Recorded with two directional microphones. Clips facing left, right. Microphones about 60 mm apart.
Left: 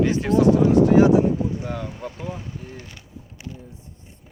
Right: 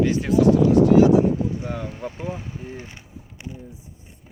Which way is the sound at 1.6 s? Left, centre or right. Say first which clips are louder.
Even; centre.